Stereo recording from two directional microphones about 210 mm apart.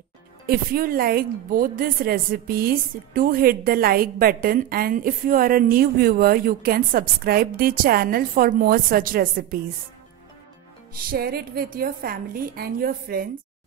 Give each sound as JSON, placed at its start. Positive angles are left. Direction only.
{"t": 0.5, "sound": "a woman's voice", "side_deg": -45}
{"t": 11.1, "sound": "a woman's voice", "side_deg": -45}